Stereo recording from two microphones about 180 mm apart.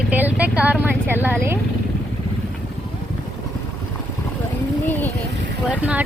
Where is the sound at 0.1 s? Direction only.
10° right (ahead or behind).